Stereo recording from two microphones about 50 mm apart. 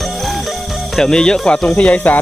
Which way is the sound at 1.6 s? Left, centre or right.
Left.